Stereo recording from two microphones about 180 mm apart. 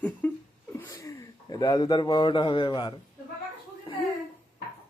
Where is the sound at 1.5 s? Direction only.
20° left (ahead or behind).